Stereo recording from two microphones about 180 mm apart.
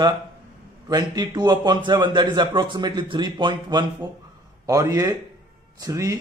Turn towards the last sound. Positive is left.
turn(degrees=-20)  # may be behind; listen again after turning